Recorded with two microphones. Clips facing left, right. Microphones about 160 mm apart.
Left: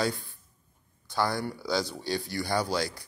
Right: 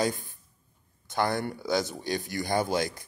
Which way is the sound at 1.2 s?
50° right (ahead or behind).